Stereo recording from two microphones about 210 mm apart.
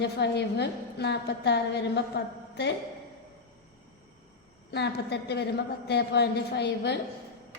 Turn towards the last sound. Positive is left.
turn(degrees=55)  # may be behind; listen again after turning